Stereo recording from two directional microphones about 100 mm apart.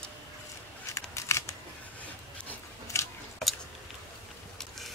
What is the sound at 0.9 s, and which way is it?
Scissors, 30° left (ahead or behind).